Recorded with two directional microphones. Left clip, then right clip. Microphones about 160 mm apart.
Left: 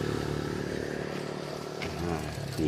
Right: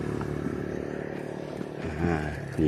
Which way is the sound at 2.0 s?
45° right (ahead or behind).